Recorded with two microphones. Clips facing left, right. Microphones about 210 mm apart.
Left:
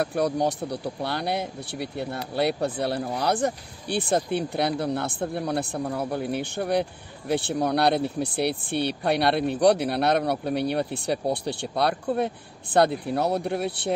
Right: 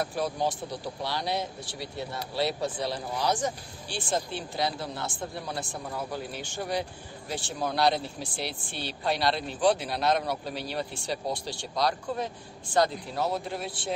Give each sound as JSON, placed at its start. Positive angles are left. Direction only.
{"t": 0.0, "sound": "speech", "side_deg": 60}